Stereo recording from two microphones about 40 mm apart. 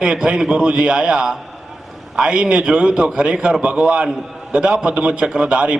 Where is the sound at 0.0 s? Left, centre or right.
Right.